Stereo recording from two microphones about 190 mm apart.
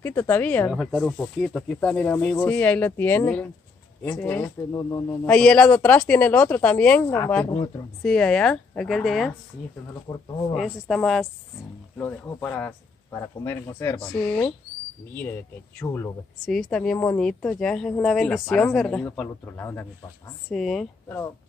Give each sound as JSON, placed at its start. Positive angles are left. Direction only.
{"t": 0.0, "sound": "speech", "side_deg": 10}
{"t": 8.0, "sound": "a woman's voice", "side_deg": 5}
{"t": 10.5, "sound": "a woman's voice", "side_deg": 0}
{"t": 16.4, "sound": "a woman's voice", "side_deg": 0}